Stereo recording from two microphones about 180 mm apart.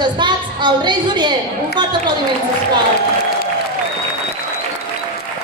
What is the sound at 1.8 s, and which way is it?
Speech, 25° right (ahead or behind).